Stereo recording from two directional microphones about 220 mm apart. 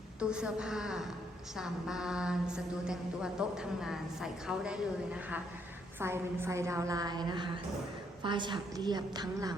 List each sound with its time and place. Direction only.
0.2 s a woman's voice: 5° right (ahead or behind)